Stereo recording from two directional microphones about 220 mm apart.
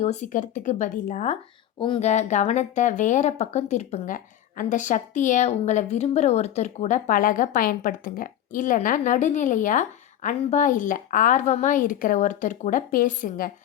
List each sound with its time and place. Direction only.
0.0 s speech: 30° left (ahead or behind)